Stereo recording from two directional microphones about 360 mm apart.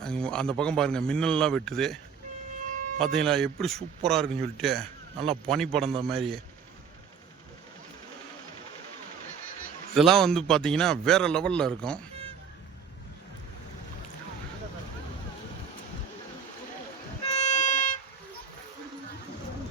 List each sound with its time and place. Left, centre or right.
0.0 s a man's voice: centre
3.0 s a man's voice: centre
9.9 s a man's voice: centre
17.3 s music: centre